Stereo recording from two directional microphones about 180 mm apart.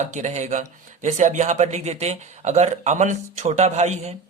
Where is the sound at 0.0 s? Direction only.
40° right (ahead or behind).